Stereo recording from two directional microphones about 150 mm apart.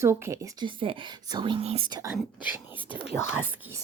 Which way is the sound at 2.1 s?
10° right (ahead or behind).